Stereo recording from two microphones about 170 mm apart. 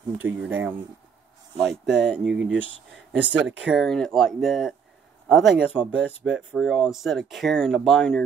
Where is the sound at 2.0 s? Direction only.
5° right (ahead or behind).